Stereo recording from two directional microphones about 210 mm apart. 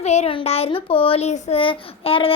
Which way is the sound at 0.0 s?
30° left (ahead or behind).